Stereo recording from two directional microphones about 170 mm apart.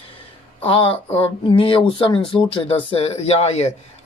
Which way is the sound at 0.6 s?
30° left (ahead or behind).